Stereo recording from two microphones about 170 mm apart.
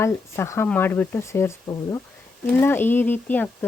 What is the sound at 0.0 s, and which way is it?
Speech, 15° left (ahead or behind).